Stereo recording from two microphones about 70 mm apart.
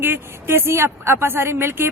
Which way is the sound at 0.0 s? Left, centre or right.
Right.